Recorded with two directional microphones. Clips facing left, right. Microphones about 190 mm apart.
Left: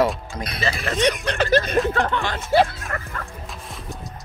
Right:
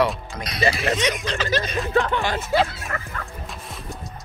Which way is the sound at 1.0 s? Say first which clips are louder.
Left 4 dB; 60° left (ahead or behind).